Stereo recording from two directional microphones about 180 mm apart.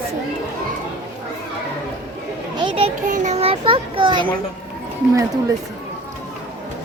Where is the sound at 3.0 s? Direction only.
45° right (ahead or behind); by 4.2 s 25° right (ahead or behind).